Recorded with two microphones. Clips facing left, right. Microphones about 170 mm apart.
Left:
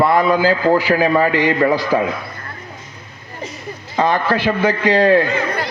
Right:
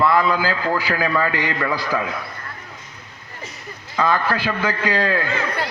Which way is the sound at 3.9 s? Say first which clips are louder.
Left 4 dB; 35° left (ahead or behind).